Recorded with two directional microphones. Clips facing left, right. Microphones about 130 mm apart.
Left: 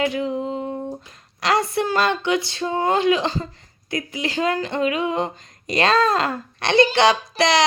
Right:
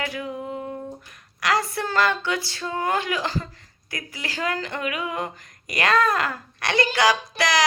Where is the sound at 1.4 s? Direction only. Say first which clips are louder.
Left 4 dB; 25° left (ahead or behind).